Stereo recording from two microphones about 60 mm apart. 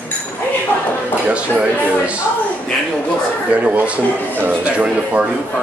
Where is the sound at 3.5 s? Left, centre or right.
Right.